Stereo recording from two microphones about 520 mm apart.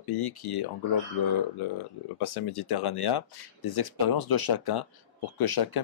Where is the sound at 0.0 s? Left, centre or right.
Left.